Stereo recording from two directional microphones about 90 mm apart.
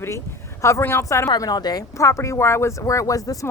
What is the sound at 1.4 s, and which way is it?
Speech, 50° left (ahead or behind).